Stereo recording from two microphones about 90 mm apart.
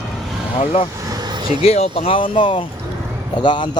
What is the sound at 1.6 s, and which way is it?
Speech, 90° left.